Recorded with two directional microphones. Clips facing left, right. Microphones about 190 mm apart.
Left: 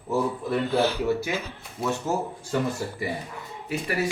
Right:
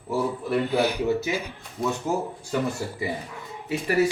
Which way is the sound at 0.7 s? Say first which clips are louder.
Left 1 dB; 15° right (ahead or behind).